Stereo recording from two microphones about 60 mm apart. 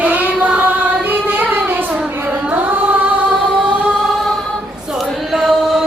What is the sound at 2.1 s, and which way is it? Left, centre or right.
Carnatic music, right.